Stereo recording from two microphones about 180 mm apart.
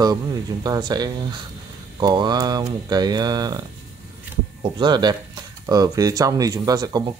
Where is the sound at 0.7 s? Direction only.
20° right (ahead or behind).